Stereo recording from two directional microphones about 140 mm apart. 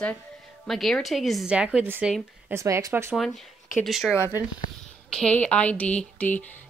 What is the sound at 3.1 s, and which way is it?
Speech, centre (ahead or behind).